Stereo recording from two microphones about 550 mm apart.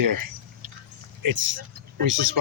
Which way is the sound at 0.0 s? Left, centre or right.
Right.